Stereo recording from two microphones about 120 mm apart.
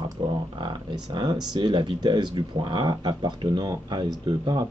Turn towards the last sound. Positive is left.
turn(degrees=-35)  # may be behind; listen again after turning